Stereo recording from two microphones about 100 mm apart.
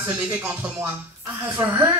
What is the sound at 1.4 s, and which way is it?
Speech, 25° right (ahead or behind).